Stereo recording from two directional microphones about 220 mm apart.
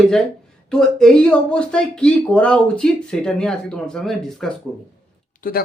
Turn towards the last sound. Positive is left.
turn(degrees=40)  # may be behind; listen again after turning